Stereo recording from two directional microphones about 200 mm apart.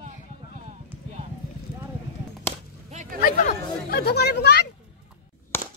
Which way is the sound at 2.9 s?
35° right (ahead or behind).